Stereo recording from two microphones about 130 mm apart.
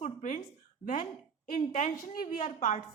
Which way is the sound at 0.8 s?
90° left.